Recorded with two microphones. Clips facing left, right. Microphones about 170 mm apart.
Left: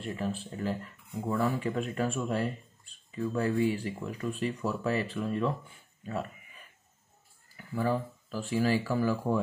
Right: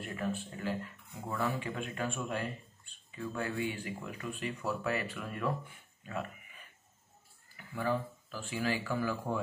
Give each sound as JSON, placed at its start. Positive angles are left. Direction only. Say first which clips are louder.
{"t": 0.0, "sound": "speech", "louder": "left 3 dB", "side_deg": 30}
{"t": 7.5, "sound": "speech", "louder": "left 4 dB", "side_deg": 40}